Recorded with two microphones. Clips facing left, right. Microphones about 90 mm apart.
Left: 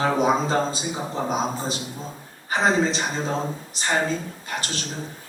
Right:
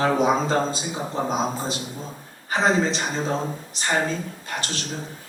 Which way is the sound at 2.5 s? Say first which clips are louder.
Even; 10° left (ahead or behind).